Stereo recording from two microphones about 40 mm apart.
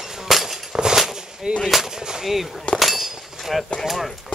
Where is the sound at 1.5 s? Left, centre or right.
Right.